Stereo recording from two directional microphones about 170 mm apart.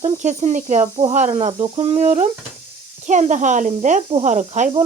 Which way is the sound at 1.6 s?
40° right (ahead or behind).